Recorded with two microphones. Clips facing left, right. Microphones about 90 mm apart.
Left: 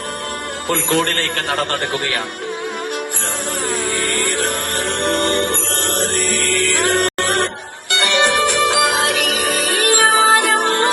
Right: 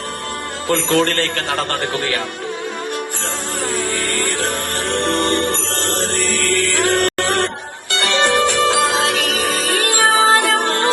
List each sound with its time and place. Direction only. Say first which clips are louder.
0.7 s a man's voice: right 2 dB; 15° left (ahead or behind)
3.7 s a sound: even; 15° left (ahead or behind)
4.8 s music: even; 15° left (ahead or behind)
7.9 s music: left 1 dB; 20° right (ahead or behind)
8.2 s music: right 1 dB; 15° left (ahead or behind)